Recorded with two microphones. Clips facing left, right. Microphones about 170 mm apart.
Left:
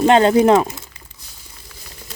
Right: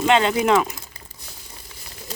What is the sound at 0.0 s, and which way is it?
Speech, 40° left (ahead or behind).